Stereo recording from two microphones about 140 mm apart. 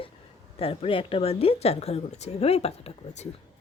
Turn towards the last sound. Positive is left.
turn(degrees=50)  # may be behind; listen again after turning